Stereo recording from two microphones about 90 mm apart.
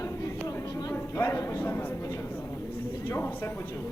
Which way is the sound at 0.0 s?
40° left (ahead or behind).